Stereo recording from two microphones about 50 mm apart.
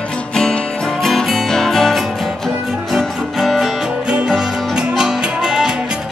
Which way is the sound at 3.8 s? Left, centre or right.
Centre.